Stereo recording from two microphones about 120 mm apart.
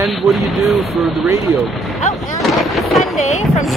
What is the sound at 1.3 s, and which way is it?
Speech, 25° right (ahead or behind).